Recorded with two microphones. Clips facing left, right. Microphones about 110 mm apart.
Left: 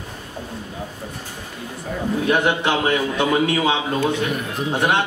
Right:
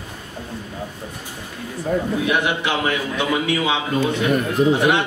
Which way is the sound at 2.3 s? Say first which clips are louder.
Left 4 dB; 40° left (ahead or behind).